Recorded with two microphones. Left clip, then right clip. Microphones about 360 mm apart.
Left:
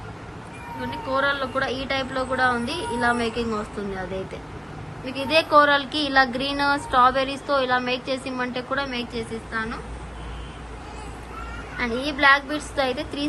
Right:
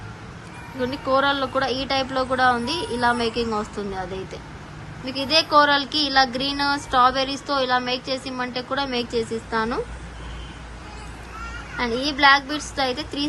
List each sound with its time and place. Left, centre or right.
0.8 s speech: centre
5.0 s speech: centre
11.8 s speech: centre